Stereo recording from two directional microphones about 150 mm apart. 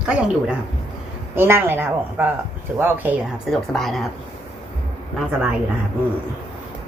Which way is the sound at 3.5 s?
Centre (ahead or behind).